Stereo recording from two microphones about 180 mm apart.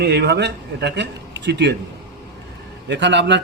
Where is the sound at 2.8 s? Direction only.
75° right (ahead or behind).